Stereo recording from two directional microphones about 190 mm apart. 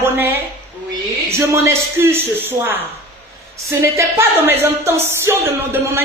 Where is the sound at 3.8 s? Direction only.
15° right (ahead or behind).